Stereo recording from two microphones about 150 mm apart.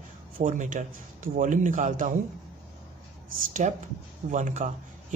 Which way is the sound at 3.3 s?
60° right (ahead or behind).